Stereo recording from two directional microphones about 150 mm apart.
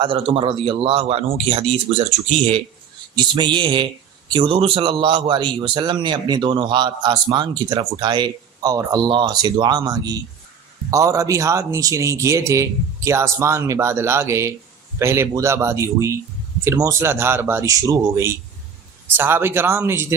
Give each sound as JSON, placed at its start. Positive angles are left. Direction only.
{"t": 0.0, "sound": "a man's voice", "side_deg": -35}